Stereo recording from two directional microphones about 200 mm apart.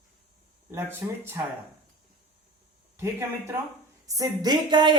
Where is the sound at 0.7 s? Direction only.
10° right (ahead or behind).